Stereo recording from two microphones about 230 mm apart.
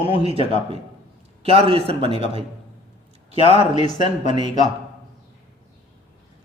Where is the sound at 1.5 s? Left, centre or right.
Right.